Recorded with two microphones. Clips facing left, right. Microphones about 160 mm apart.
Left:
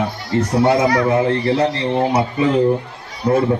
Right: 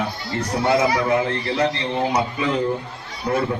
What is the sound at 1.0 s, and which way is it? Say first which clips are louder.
A man's voice: left 5 dB; 30° left (ahead or behind).